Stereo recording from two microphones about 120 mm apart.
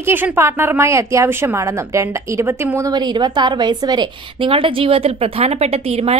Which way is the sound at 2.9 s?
40° right (ahead or behind).